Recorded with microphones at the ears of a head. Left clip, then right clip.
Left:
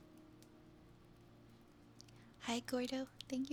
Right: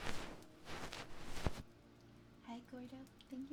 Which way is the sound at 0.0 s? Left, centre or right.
Right.